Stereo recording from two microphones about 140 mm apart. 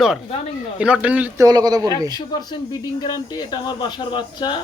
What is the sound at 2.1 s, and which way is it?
Speech, 30° left (ahead or behind).